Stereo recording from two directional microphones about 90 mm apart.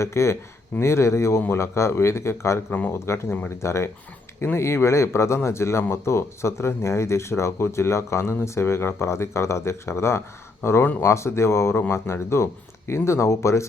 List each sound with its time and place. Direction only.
0.0 s speech: 30° left (ahead or behind)
2.7 s speech: 20° left (ahead or behind)
3.6 s speech: 30° left (ahead or behind)